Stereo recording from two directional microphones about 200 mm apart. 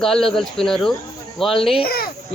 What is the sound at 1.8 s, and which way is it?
Speech, 50° left (ahead or behind).